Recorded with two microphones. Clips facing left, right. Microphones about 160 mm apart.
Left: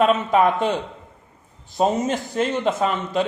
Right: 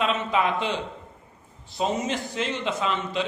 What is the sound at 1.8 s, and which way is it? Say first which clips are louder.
A man's voice: left 6 dB; 50° left (ahead or behind).